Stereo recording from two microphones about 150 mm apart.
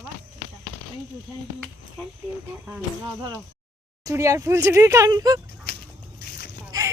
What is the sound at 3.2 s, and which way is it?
Speech, 25° right (ahead or behind).